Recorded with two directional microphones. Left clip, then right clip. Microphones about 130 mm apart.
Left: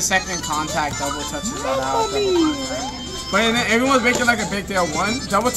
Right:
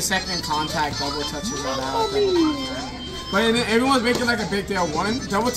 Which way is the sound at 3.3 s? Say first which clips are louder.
Left 2 dB; 10° right (ahead or behind).